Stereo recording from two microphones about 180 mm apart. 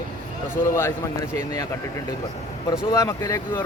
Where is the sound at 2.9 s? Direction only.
20° left (ahead or behind).